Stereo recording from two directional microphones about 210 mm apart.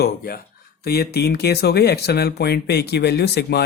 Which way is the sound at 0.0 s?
45° left (ahead or behind).